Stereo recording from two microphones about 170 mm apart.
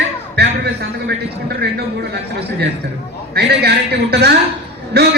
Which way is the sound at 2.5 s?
80° right.